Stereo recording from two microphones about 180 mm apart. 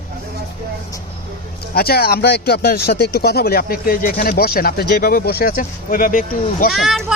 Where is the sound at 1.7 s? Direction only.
60° left (ahead or behind).